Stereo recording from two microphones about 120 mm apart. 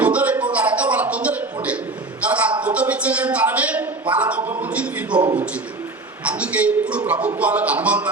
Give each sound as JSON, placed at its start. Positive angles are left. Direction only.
{"t": 0.0, "sound": "a sound", "side_deg": -10}
{"t": 4.1, "sound": "speech", "side_deg": -10}
{"t": 6.2, "sound": "a man's voice", "side_deg": -10}